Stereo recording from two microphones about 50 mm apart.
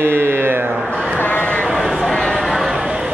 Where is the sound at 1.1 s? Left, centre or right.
Left.